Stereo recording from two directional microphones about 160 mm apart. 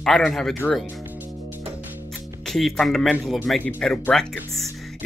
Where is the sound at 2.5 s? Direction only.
Centre (ahead or behind).